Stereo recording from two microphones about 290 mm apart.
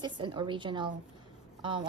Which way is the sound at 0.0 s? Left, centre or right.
Centre.